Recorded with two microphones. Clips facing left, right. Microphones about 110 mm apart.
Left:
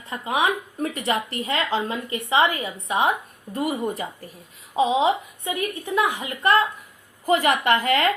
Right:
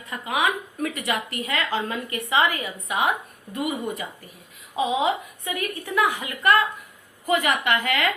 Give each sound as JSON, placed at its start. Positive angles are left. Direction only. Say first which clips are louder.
{"t": 0.1, "sound": "a woman's voice", "louder": "left 2 dB", "side_deg": 25}